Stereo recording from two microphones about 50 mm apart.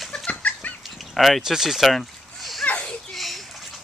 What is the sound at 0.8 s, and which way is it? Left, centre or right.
Dog, centre.